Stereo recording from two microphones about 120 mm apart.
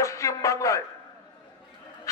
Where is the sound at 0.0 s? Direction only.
25° left (ahead or behind).